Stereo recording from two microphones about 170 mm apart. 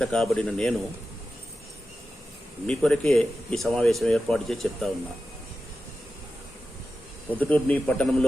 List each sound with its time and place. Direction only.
0.0 s speech: 5° left (ahead or behind)
2.6 s speech: 5° left (ahead or behind)
7.3 s speech: 10° left (ahead or behind)